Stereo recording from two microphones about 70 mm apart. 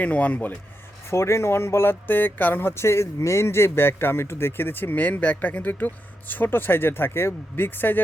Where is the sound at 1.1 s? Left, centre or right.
Left.